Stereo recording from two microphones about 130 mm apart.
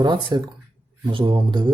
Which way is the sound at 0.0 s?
35° right (ahead or behind).